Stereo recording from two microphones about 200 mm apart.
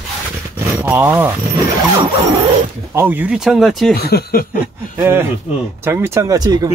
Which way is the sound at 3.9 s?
50° left (ahead or behind).